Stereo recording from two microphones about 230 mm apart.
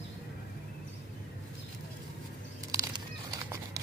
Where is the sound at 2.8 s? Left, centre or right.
Centre.